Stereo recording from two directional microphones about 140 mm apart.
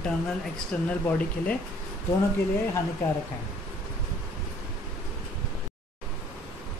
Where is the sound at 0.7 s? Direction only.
10° left (ahead or behind).